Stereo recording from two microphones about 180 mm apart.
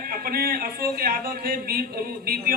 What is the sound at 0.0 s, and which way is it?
A man's voice, 55° right (ahead or behind).